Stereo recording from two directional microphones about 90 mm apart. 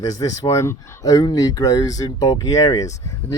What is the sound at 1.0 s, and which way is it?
Speech, 45° left (ahead or behind).